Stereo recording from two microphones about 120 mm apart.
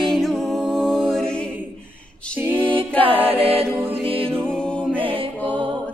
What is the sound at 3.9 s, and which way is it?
Music, 50° right (ahead or behind).